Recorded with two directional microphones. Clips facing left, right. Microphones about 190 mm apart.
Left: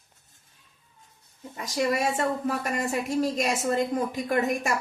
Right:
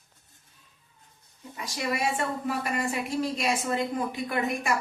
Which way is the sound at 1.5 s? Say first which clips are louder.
Left 5 dB; 40° left (ahead or behind).